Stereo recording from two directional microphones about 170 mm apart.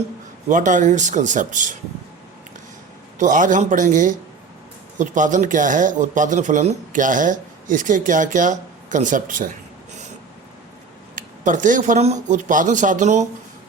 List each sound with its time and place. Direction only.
0.4 s speech: 50° right (ahead or behind)
3.2 s speech: 50° right (ahead or behind)
11.1 s speech: 50° right (ahead or behind)